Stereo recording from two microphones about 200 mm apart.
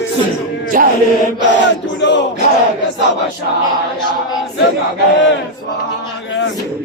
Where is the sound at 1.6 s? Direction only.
65° left (ahead or behind).